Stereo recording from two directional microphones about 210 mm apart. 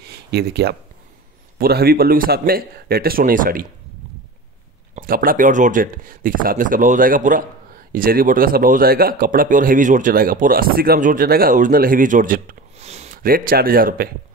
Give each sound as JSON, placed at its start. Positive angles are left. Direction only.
{"t": 0.0, "sound": "a sound", "side_deg": -50}
{"t": 1.6, "sound": "speech", "side_deg": -45}
{"t": 4.9, "sound": "speech", "side_deg": -40}